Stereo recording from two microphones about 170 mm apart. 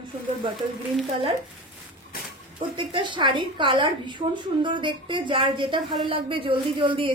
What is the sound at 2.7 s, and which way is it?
A woman's voice, 30° right (ahead or behind).